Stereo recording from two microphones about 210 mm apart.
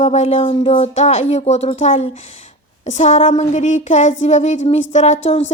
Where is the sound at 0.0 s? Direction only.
30° left (ahead or behind).